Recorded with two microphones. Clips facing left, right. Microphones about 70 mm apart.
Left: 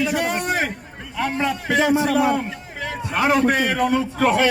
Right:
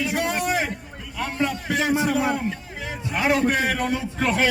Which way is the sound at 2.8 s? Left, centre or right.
Left.